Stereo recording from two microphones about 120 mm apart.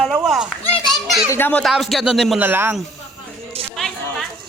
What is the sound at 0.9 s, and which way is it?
Children playing, centre (ahead or behind).